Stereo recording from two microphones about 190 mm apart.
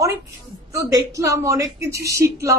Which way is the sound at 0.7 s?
15° right (ahead or behind).